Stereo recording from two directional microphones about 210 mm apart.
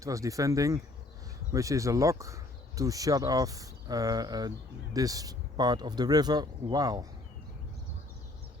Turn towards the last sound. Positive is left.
turn(degrees=-20)  # may be behind; listen again after turning